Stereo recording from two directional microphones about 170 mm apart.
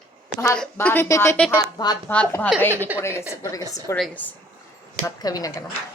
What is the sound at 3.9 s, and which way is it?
Speech, 10° left (ahead or behind).